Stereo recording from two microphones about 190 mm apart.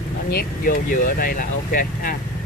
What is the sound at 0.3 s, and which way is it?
Speech, 50° left (ahead or behind).